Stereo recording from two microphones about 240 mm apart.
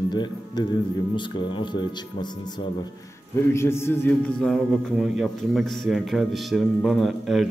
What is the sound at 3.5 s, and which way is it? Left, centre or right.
A man's voice, centre.